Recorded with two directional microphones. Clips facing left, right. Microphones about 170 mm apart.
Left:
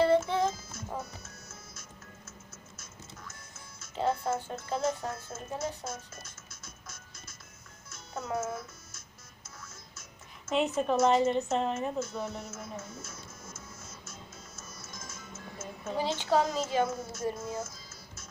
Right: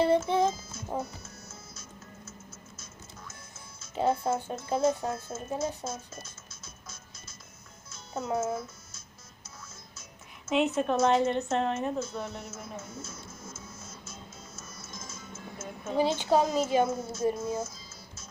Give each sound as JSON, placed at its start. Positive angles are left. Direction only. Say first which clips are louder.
{"t": 0.0, "sound": "music", "louder": "right 1 dB", "side_deg": -15}
{"t": 3.8, "sound": "speech", "louder": "right 3 dB", "side_deg": -15}
{"t": 7.9, "sound": "music", "louder": "right 4 dB", "side_deg": -20}
{"t": 10.5, "sound": "a woman's voice", "louder": "right 2 dB", "side_deg": 0}
{"t": 13.0, "sound": "music", "louder": "right 3 dB", "side_deg": 0}
{"t": 16.0, "sound": "speech", "louder": "right 3 dB", "side_deg": -15}